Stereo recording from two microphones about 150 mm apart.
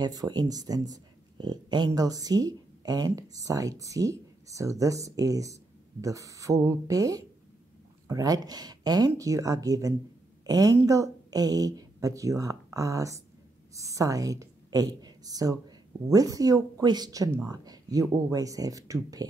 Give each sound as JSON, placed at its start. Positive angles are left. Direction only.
{"t": 0.0, "sound": "a woman's voice", "side_deg": -25}